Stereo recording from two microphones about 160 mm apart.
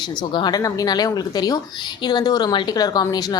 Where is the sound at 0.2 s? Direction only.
25° left (ahead or behind).